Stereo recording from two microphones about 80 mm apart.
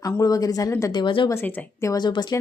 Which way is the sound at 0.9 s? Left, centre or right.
Left.